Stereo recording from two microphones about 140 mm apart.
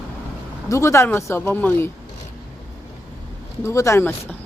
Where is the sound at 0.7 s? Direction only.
20° left (ahead or behind).